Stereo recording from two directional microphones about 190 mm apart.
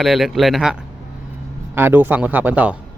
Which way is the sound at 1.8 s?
10° right (ahead or behind).